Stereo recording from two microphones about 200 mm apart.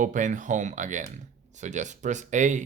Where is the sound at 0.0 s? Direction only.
40° right (ahead or behind).